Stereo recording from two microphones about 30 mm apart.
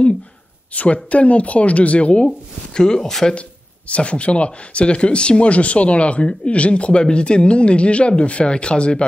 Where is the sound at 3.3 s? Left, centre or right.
Left.